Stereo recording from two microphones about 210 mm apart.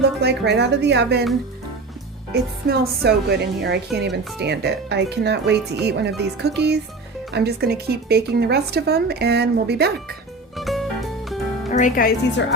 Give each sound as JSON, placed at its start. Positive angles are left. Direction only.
{"t": 0.0, "sound": "a woman's voice", "side_deg": -55}
{"t": 2.3, "sound": "a woman's voice", "side_deg": -50}
{"t": 10.6, "sound": "music", "side_deg": 0}
{"t": 11.7, "sound": "a woman's voice", "side_deg": 40}